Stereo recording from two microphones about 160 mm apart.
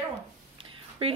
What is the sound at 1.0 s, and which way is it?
Speech, 40° right (ahead or behind).